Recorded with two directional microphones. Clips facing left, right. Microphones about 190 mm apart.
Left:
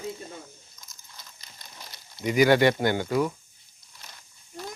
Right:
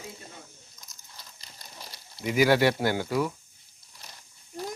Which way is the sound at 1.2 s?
35° right (ahead or behind).